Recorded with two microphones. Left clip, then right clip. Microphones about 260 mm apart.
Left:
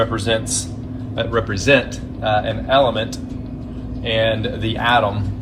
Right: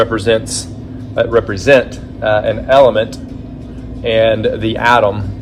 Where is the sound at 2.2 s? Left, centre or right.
Centre.